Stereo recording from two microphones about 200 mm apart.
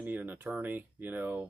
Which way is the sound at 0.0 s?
10° right (ahead or behind).